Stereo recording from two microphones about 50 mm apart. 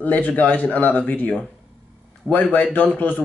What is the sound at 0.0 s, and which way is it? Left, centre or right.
Speech, left.